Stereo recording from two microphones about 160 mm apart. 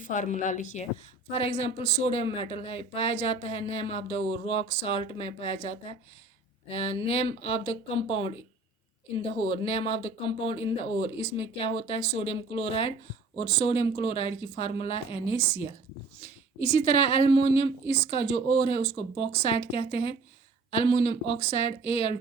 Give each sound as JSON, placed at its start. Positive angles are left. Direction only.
{"t": 0.0, "sound": "a woman's voice", "side_deg": 50}
{"t": 1.3, "sound": "speech", "side_deg": 40}